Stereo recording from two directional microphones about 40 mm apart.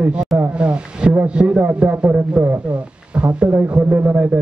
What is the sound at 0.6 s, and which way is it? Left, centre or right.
A man's voice, right.